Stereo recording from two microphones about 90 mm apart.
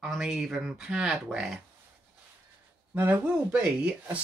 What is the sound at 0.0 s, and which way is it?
Speech, 5° right (ahead or behind).